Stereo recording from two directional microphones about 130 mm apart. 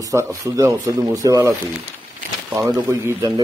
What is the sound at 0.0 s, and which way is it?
Speech, 25° right (ahead or behind).